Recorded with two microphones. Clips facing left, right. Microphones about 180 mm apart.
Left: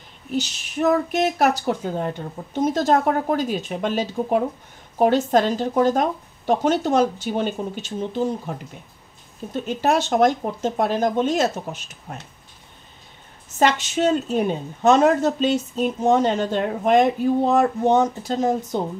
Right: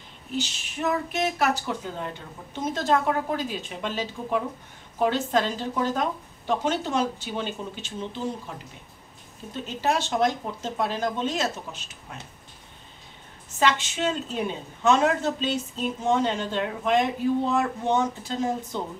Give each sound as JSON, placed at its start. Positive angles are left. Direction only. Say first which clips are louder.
{"t": 0.4, "sound": "a woman's voice", "louder": "left 7 dB", "side_deg": 40}
{"t": 13.6, "sound": "a woman's voice", "louder": "left 5 dB", "side_deg": 45}